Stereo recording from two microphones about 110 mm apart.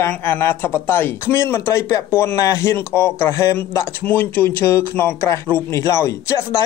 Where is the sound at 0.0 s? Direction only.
20° left (ahead or behind).